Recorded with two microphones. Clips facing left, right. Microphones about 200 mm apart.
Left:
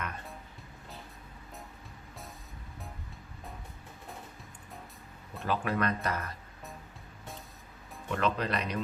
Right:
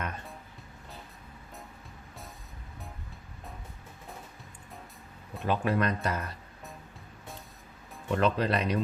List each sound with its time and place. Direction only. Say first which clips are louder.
5.4 s speech: right 3 dB; 25° right (ahead or behind)
8.1 s speech: right 4 dB; 30° right (ahead or behind)